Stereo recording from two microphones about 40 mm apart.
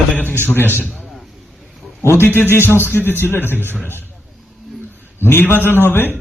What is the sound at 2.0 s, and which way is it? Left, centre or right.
A man's voice, left.